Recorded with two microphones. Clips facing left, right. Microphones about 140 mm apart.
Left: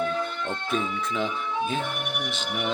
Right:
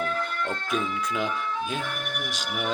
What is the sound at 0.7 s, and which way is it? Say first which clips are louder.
Speech: left 1 dB; 5° right (ahead or behind).